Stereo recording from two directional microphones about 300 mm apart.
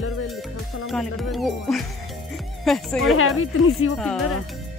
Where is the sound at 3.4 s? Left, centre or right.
Left.